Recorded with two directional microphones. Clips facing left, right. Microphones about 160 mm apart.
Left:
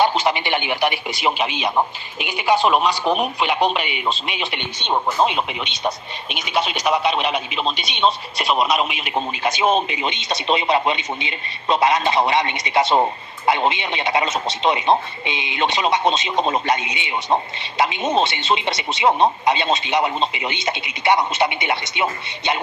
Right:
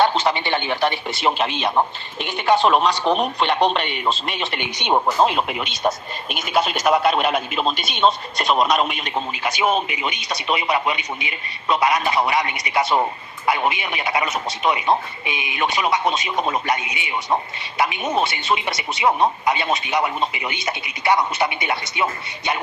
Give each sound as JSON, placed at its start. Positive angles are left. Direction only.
{"t": 0.0, "sound": "radio", "side_deg": 10}
{"t": 0.3, "sound": "speech", "side_deg": 15}
{"t": 4.6, "sound": "speech", "side_deg": -10}
{"t": 5.0, "sound": "speech", "side_deg": 0}
{"t": 9.1, "sound": "speech", "side_deg": 20}